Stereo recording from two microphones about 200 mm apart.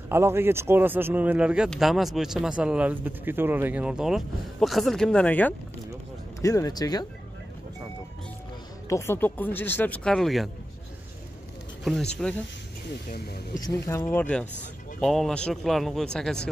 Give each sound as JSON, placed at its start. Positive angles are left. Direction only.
{"t": 0.1, "sound": "speech", "side_deg": -10}
{"t": 8.8, "sound": "speech", "side_deg": 15}
{"t": 11.8, "sound": "speech", "side_deg": 0}
{"t": 13.7, "sound": "speech", "side_deg": 15}